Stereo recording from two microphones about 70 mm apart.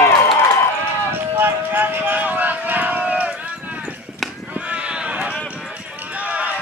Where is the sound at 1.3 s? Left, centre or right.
Right.